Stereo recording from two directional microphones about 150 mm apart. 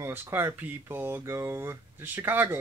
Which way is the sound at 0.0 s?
15° right (ahead or behind).